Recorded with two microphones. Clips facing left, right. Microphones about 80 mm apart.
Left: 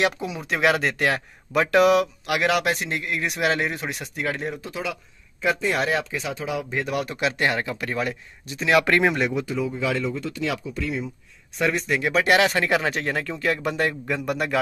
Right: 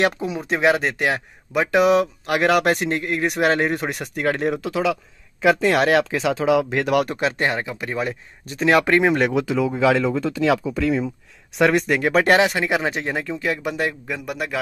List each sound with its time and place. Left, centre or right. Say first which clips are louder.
0.0 s speech: right 3 dB; right
0.4 s speech: right 2 dB; right
1.9 s speech: right 2 dB; right
7.2 s speech: right 2 dB; right
8.5 s speech: right 3 dB; right
8.8 s speech: right 3 dB; right
9.2 s speech: right 5 dB; right
11.5 s speech: right 6 dB; right
12.4 s speech: right 1 dB; centre